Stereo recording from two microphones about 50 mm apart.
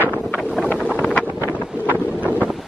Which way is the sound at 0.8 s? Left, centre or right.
Right.